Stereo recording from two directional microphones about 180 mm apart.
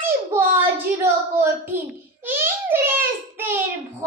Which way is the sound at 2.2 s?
10° right (ahead or behind).